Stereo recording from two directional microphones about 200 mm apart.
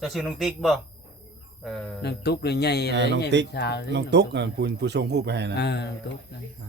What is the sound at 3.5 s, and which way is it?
Speech, 55° left (ahead or behind).